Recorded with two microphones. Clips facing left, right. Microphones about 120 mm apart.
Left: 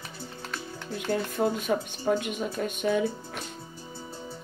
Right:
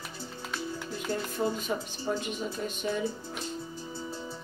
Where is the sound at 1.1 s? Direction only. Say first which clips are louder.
Left 4 dB; 60° left (ahead or behind).